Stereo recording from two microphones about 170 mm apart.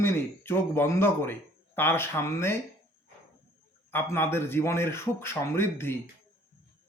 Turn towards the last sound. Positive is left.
turn(degrees=15)  # may be behind; listen again after turning